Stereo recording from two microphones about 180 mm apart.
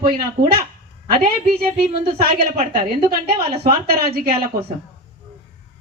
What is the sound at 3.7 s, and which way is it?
Speech, 55° right (ahead or behind).